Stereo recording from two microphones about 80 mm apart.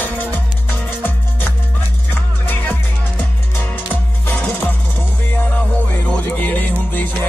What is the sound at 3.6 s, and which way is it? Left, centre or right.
Music, left.